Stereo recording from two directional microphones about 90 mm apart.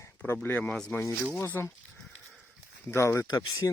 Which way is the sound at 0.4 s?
20° left (ahead or behind).